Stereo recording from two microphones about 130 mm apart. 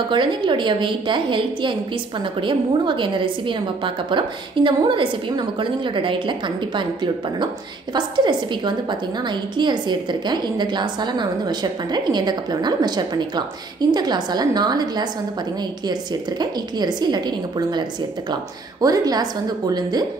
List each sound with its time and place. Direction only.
0.1 s a woman's voice: 40° right (ahead or behind)